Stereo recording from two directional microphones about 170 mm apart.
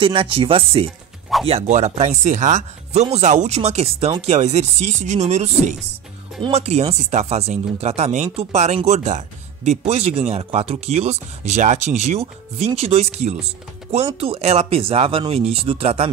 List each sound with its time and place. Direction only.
0.0 s speech: 30° right (ahead or behind)